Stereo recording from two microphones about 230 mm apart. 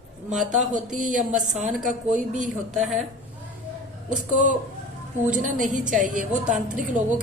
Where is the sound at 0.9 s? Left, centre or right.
Right.